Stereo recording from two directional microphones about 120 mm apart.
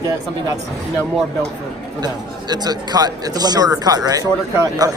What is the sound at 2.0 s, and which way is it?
Speech, 35° right (ahead or behind).